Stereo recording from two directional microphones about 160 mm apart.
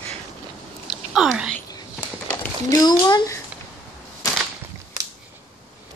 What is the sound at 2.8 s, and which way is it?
Speech, 25° left (ahead or behind).